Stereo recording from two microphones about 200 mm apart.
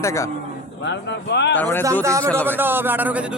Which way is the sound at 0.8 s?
60° left (ahead or behind).